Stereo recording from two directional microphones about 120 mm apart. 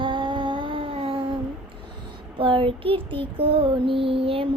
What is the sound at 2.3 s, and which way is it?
Child singing, 45° right (ahead or behind).